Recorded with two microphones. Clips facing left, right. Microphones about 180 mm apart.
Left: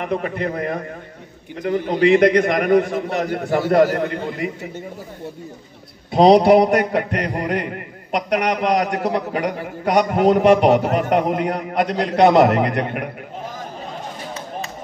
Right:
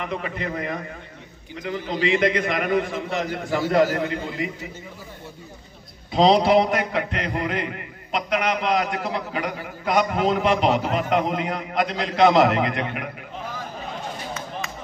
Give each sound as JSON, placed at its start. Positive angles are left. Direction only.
{"t": 0.0, "sound": "a man's voice", "side_deg": 50}
{"t": 6.1, "sound": "a man's voice", "side_deg": 55}